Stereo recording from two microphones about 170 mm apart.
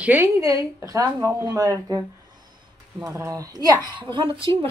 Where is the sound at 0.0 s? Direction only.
10° right (ahead or behind).